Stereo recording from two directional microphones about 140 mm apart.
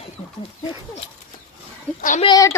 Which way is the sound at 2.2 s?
25° left (ahead or behind).